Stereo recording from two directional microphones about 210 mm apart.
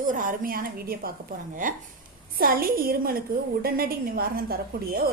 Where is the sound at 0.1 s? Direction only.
40° right (ahead or behind).